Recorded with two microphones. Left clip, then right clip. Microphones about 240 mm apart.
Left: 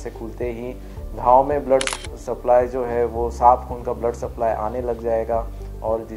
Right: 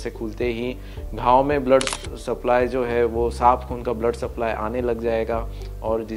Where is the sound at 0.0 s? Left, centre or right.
Right.